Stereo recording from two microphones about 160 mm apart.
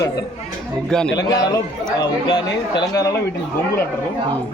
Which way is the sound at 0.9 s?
5° left (ahead or behind).